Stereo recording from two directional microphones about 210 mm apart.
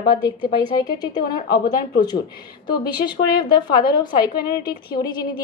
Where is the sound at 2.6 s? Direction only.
20° left (ahead or behind).